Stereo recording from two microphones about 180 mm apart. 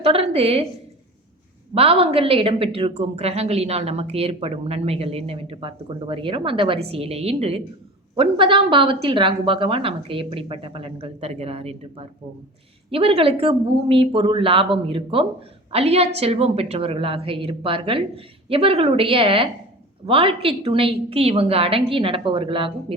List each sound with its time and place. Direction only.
0.0 s a woman's voice: 35° right (ahead or behind)
1.7 s a woman's voice: 30° right (ahead or behind)